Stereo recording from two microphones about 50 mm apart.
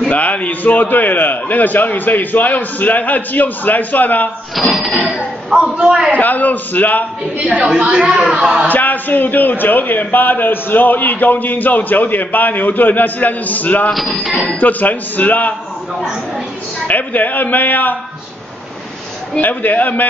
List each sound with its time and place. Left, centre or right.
0.1 s a man's voice: left
4.6 s speech: centre
5.5 s speech: centre
6.1 s a man's voice: left
7.8 s speech: right
8.6 s a man's voice: left
16.8 s a man's voice: left
19.4 s a man's voice: left